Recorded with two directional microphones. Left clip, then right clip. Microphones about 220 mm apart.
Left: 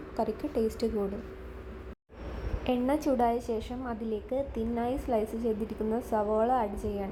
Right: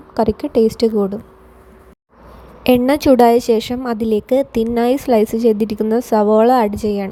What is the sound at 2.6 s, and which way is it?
A woman's voice, 50° right (ahead or behind).